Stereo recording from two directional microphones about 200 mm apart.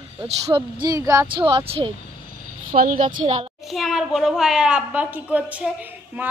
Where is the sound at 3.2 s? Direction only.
30° right (ahead or behind).